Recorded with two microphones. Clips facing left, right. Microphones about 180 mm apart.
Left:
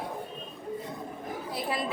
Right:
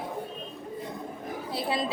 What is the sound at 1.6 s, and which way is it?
Chatter, 25° right (ahead or behind).